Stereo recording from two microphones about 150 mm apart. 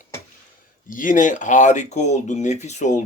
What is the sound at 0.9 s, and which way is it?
Speech, 60° left (ahead or behind).